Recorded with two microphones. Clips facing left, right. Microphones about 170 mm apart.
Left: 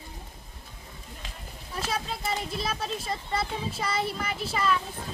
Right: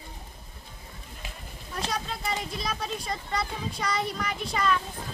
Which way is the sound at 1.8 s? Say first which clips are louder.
Left 1 dB; 5° left (ahead or behind).